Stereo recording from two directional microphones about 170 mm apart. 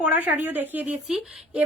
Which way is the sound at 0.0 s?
10° right (ahead or behind).